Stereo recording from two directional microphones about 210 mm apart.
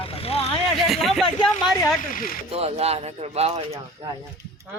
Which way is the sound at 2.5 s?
30° right (ahead or behind).